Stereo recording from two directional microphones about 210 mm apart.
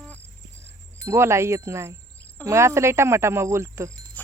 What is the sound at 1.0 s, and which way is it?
Speech, 10° right (ahead or behind).